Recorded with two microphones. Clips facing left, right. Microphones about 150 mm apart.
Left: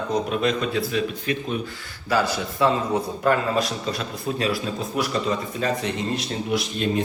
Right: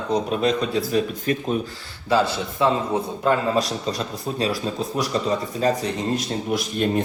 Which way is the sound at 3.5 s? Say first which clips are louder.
Right 2 dB; 35° right (ahead or behind).